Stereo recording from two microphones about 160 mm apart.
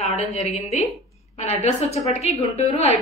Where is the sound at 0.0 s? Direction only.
45° left (ahead or behind).